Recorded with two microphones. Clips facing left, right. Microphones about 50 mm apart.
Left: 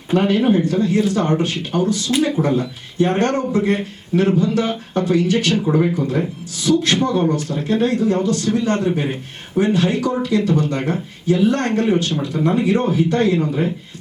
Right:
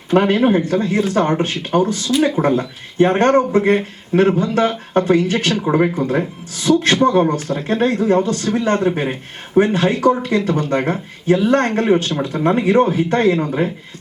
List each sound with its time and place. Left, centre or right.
0.1 s speech: right